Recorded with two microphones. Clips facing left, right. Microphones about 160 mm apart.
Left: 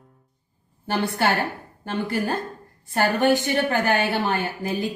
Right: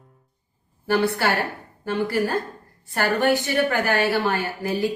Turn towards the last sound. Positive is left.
turn(degrees=20)  # may be behind; listen again after turning